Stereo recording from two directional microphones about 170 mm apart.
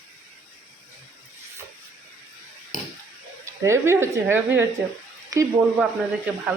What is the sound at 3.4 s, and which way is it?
A woman's voice, 15° right (ahead or behind).